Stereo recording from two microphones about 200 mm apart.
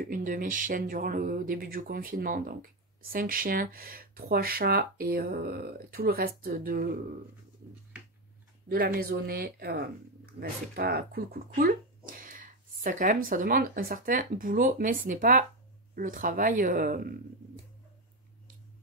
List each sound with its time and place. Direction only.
0.0 s speech: 40° right (ahead or behind)
8.6 s speech: 50° right (ahead or behind)